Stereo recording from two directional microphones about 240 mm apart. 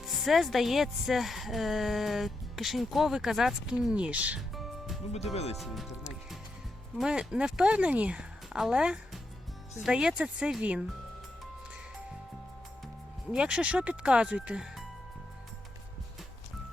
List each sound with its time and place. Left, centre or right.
0.0 s speech: centre
5.1 s speech: left
5.5 s speech: centre
13.3 s speech: centre